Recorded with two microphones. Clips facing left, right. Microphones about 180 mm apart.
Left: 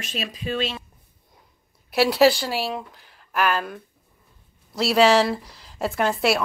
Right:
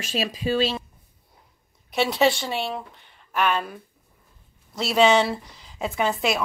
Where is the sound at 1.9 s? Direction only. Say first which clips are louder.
Left 4 dB; 5° left (ahead or behind).